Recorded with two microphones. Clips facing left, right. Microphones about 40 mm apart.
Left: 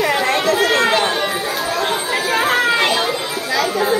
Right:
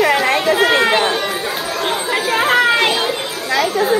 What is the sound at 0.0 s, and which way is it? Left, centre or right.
Chatter, centre.